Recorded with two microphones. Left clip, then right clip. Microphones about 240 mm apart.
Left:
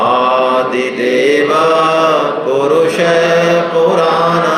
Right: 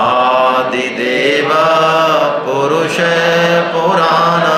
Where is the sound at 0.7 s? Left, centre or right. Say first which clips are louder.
Left 1 dB; right.